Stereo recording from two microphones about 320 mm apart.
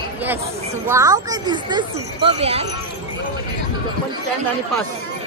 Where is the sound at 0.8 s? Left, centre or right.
Centre.